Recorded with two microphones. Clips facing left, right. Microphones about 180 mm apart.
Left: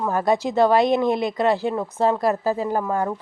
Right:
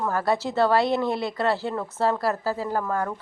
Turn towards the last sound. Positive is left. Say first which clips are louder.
# left 3 dB
turn(degrees=20)  # may be behind; listen again after turning